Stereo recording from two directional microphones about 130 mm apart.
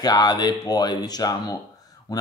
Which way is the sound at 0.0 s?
30° left (ahead or behind).